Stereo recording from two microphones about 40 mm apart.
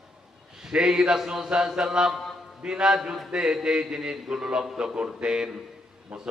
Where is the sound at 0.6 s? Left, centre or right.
Centre.